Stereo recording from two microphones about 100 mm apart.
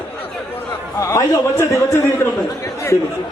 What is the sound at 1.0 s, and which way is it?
A man's voice, 30° left (ahead or behind).